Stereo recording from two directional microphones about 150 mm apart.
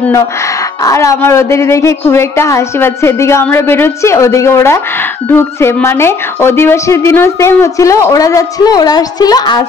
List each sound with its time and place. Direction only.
0.8 s a woman's voice: 20° left (ahead or behind)